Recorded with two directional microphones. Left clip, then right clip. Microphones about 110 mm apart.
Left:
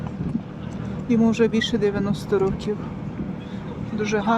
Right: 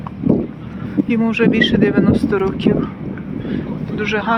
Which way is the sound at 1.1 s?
10° left (ahead or behind).